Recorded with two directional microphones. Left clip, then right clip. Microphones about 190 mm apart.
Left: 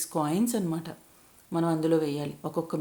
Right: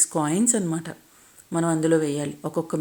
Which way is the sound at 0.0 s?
25° right (ahead or behind).